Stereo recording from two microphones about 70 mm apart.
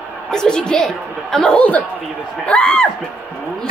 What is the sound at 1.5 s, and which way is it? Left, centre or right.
A woman's voice, centre.